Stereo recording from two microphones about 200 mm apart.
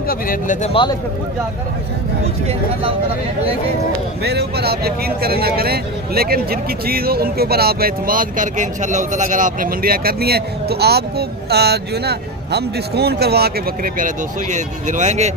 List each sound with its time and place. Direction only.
0.1 s speech: 45° left (ahead or behind)
4.2 s speech: 55° right (ahead or behind)
13.9 s speech: 40° right (ahead or behind)